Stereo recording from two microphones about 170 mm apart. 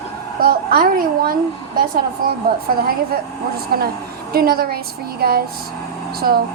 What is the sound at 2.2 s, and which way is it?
A woman's voice, 60° right (ahead or behind).